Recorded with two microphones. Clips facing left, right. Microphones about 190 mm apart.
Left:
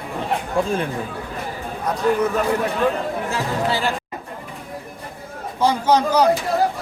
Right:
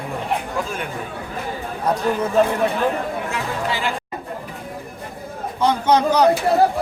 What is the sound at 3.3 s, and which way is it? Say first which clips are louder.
Speech: left 2 dB; 35° left (ahead or behind).